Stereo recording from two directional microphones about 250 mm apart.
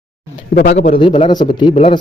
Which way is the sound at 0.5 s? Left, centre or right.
Left.